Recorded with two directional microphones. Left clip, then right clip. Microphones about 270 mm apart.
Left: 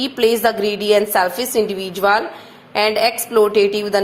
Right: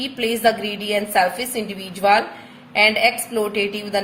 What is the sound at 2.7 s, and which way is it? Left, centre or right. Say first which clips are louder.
A woman's voice: even; centre.